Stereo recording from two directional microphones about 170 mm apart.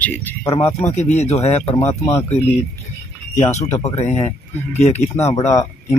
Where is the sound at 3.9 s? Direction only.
40° left (ahead or behind).